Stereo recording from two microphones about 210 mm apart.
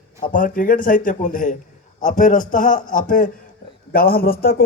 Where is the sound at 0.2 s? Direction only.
40° left (ahead or behind).